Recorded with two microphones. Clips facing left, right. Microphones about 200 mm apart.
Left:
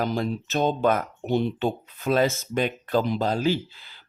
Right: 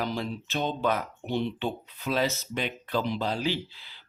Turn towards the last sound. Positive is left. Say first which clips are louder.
# left 6 dB
turn(degrees=45)  # may be behind; listen again after turning